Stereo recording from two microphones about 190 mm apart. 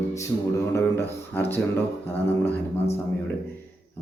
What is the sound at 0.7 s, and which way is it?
Speech, 15° left (ahead or behind).